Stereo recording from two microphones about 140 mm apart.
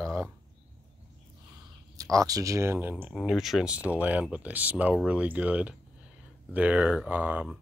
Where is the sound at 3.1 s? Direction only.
Centre (ahead or behind).